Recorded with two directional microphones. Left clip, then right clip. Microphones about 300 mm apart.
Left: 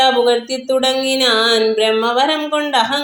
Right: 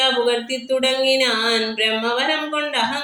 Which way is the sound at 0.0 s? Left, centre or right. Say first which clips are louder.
Left 5 dB; centre.